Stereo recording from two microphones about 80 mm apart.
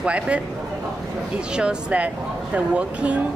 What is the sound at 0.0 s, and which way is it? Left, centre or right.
Speech, centre.